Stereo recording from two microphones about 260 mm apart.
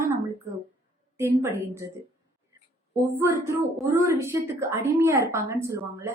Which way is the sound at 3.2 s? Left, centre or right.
Centre.